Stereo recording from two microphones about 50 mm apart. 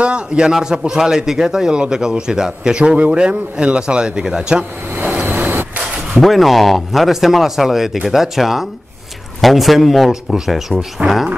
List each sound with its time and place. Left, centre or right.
0.0 s a man's voice: centre
5.0 s vehicle: right
5.5 s vehicle: right
6.1 s speech: centre
11.0 s speech: right